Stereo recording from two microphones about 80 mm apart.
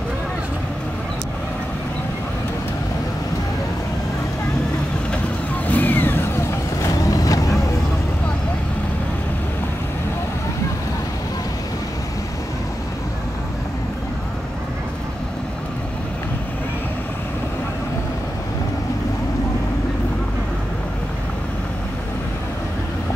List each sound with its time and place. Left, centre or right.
5.7 s vehicle: left